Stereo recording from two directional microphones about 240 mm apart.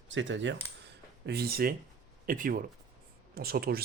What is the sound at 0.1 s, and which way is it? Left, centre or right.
Speech, right.